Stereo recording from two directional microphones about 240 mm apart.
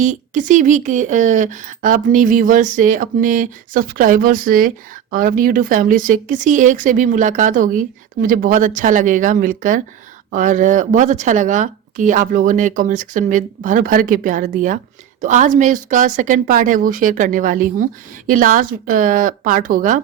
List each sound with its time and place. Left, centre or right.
0.0 s speech: right